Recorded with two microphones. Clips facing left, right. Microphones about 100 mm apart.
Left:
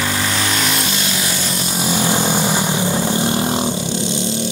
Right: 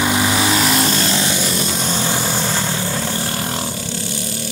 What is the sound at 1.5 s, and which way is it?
Vehicle, 5° left (ahead or behind).